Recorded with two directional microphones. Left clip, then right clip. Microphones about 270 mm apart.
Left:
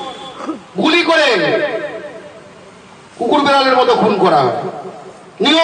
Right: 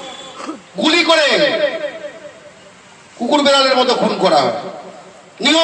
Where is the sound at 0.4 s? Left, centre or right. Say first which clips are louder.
Left 1 dB; right.